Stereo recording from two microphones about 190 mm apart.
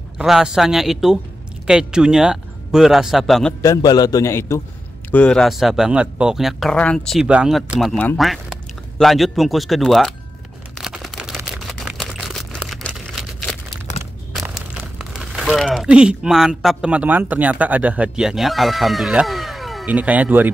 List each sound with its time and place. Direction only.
0.2 s speech: 5° right (ahead or behind)
3.6 s a man's voice: 20° left (ahead or behind); by 10.1 s centre (ahead or behind)
10.8 s a sound: centre (ahead or behind)
14.3 s speech: 5° right (ahead or behind)